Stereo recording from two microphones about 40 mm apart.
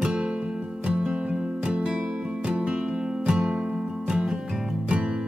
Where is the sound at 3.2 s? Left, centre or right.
Centre.